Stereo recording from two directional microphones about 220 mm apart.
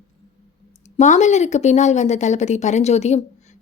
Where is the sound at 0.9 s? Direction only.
30° left (ahead or behind).